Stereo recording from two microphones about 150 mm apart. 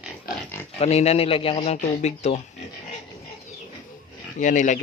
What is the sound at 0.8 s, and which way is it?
Speech, 45° left (ahead or behind).